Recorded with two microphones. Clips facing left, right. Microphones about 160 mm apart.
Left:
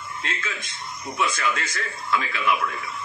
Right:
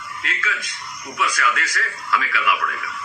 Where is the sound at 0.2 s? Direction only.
25° left (ahead or behind).